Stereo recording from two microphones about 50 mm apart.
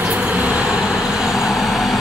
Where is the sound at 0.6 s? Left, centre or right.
Centre.